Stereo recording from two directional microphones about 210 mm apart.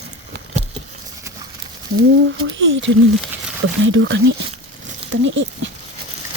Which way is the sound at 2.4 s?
65° right (ahead or behind).